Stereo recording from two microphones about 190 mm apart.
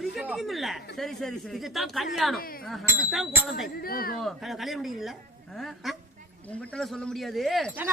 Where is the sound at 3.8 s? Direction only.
50° left (ahead or behind).